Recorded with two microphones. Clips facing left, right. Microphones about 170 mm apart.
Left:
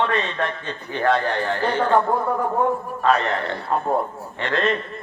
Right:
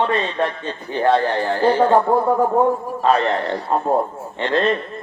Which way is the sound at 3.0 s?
30° right (ahead or behind).